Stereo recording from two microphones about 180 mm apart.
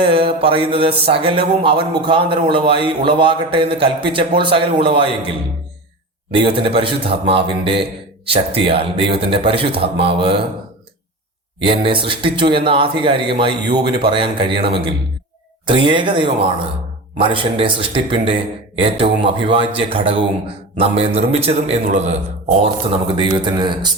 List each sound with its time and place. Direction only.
0.0 s speech: 30° right (ahead or behind)
6.3 s a man's voice: 30° right (ahead or behind)
11.6 s a man's voice: 30° right (ahead or behind)
22.6 s speech: 25° right (ahead or behind)